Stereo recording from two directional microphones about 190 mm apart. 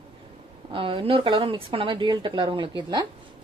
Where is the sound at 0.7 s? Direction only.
30° right (ahead or behind).